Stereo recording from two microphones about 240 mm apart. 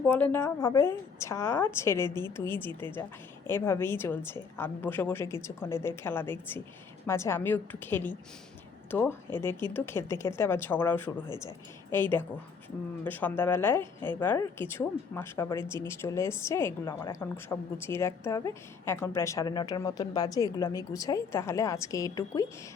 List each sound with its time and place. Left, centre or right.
0.1 s a woman's voice: centre
2.0 s a woman's voice: centre
2.3 s a woman's voice: centre